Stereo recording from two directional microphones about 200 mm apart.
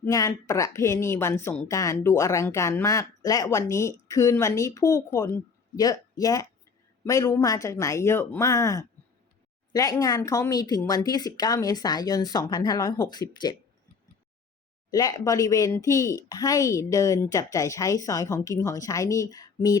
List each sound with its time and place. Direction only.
0.1 s a woman's voice: 15° left (ahead or behind)
14.8 s speech: 20° left (ahead or behind)